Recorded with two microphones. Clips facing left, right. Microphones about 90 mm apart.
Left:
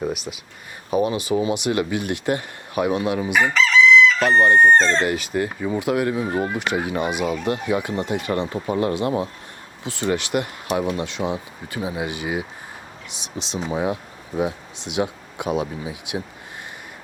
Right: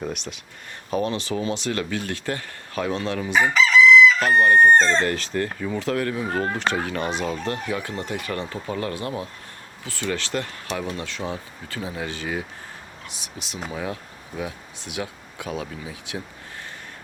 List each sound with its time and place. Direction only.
0.0 s speech: 5° left (ahead or behind)
3.5 s chicken: 5° right (ahead or behind)
4.2 s speech: 25° left (ahead or behind)